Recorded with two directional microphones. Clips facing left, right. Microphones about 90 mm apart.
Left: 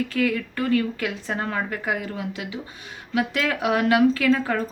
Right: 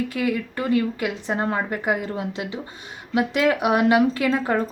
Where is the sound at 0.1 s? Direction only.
15° right (ahead or behind).